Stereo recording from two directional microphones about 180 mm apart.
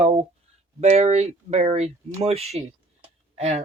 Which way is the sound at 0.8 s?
35° right (ahead or behind).